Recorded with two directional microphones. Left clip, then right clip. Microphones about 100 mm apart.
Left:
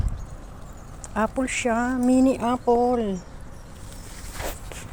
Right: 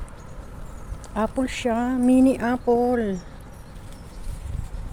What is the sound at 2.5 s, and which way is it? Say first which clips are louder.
Speech: even; 5° right (ahead or behind).